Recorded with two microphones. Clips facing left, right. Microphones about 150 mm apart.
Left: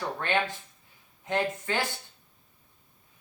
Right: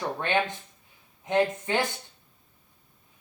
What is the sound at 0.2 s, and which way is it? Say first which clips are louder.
Speech: right 1 dB; 20° right (ahead or behind).